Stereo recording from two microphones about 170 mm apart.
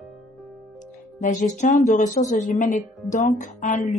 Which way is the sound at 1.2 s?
45° left (ahead or behind).